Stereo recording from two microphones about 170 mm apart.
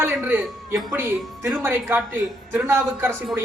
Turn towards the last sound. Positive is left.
turn(degrees=-10)  # may be behind; listen again after turning